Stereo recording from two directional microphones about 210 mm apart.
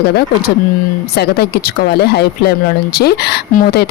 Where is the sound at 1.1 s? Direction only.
50° left (ahead or behind).